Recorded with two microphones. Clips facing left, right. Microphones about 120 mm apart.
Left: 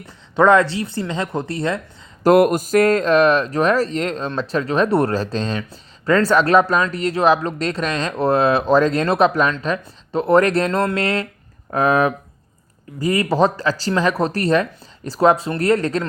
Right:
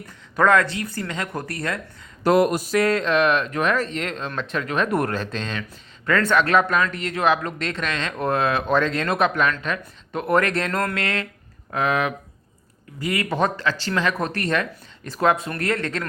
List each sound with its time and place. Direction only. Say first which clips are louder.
0.0 s speech: left 5 dB; 30° left (ahead or behind)
2.2 s speech: left 5 dB; 50° left (ahead or behind); by 16.0 s 35° left (ahead or behind)